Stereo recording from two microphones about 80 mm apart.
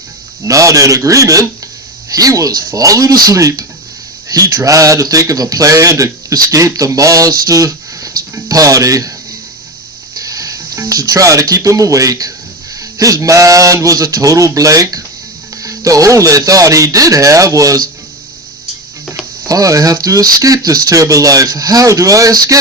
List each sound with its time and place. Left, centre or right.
0.4 s speech: right
10.2 s music: right
10.8 s speech: right
19.5 s speech: right